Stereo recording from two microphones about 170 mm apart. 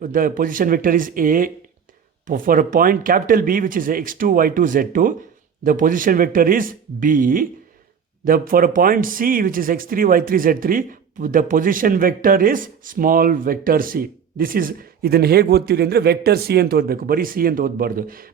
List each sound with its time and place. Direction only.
0.0 s a man's voice: 55° right (ahead or behind)